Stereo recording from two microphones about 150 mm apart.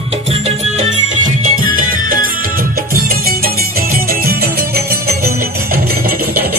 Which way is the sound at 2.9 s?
80° right.